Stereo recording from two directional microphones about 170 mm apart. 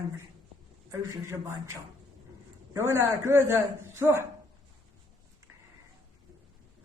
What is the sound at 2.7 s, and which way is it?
Speech, 15° right (ahead or behind).